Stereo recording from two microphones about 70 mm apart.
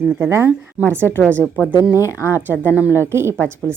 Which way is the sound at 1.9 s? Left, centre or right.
Left.